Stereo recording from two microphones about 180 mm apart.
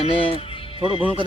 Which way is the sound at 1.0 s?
30° right (ahead or behind).